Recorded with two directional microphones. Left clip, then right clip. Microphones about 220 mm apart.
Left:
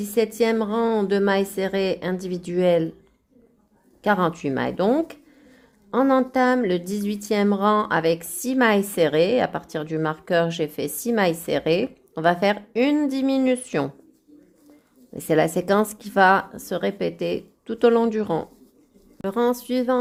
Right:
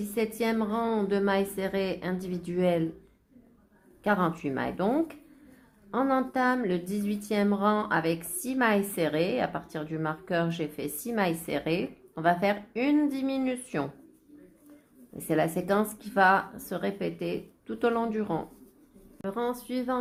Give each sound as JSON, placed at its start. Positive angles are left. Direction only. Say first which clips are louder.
{"t": 0.0, "sound": "a woman's voice", "louder": "left 8 dB", "side_deg": 40}
{"t": 4.0, "sound": "a woman's voice", "louder": "left 6 dB", "side_deg": 40}
{"t": 15.1, "sound": "a woman's voice", "louder": "left 7 dB", "side_deg": 40}
{"t": 19.2, "sound": "a woman's voice", "louder": "left 9 dB", "side_deg": 50}